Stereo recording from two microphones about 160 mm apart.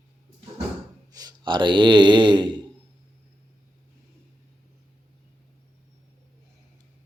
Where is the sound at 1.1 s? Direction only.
25° right (ahead or behind).